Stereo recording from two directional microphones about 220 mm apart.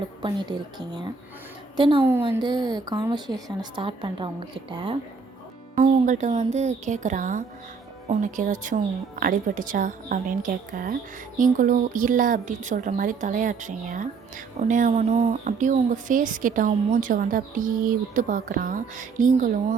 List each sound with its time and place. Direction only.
0.2 s a woman's voice: 20° right (ahead or behind)
5.7 s speech: 35° right (ahead or behind)